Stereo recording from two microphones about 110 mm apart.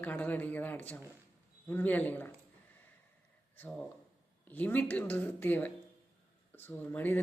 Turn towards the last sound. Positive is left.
turn(degrees=15)  # may be behind; listen again after turning